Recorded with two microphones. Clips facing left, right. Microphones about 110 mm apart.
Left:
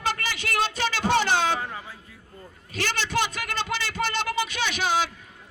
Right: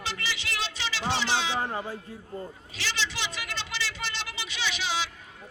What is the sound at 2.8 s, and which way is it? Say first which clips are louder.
Speech: left 7 dB; 50° left (ahead or behind).